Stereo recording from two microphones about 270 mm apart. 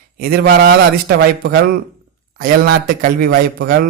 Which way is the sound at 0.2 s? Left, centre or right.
Right.